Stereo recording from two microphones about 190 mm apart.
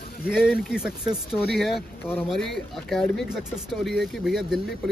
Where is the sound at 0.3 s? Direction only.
5° right (ahead or behind).